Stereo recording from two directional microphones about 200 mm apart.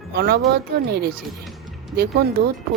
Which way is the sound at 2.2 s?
50° right (ahead or behind).